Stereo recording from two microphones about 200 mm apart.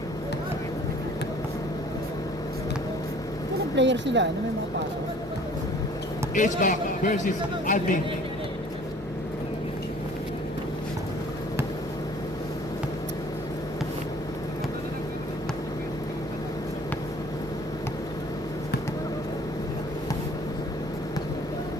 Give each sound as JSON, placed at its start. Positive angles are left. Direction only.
{"t": 3.8, "sound": "a woman's voice", "side_deg": -65}
{"t": 6.3, "sound": "a man's voice", "side_deg": 40}